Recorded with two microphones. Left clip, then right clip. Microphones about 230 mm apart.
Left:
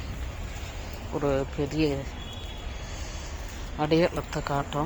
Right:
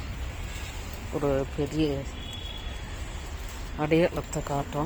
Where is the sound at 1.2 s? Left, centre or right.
Centre.